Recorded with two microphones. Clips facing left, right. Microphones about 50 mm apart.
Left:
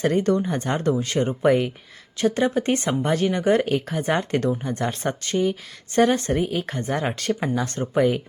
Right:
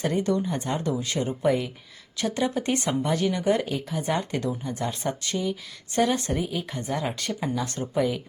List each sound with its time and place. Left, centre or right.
0.0 s speech: left
2.1 s speech: left